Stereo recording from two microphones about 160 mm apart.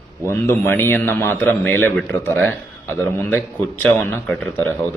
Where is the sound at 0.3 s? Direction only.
15° left (ahead or behind).